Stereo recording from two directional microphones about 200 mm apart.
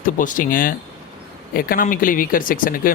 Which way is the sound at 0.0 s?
40° left (ahead or behind).